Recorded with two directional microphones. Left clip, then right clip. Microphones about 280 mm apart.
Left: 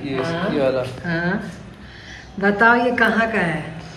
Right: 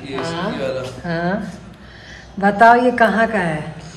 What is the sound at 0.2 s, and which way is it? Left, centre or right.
Speech, centre.